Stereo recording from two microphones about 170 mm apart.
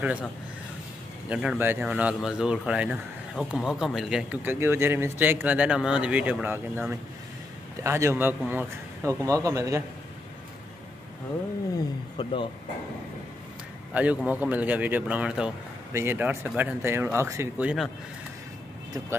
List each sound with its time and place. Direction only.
1.3 s speech: 5° right (ahead or behind)
12.2 s speech: 30° left (ahead or behind)
13.9 s speech: 10° right (ahead or behind)